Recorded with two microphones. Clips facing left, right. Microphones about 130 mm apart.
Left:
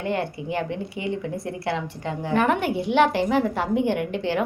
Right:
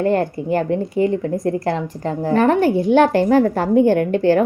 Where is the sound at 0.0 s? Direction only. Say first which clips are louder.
Right 8 dB; 40° right (ahead or behind).